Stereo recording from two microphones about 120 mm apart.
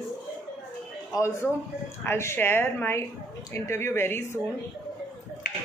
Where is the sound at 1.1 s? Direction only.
25° left (ahead or behind).